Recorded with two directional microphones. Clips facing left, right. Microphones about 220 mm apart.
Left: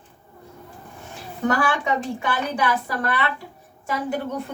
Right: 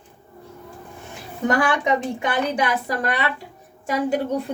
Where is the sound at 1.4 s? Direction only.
15° right (ahead or behind).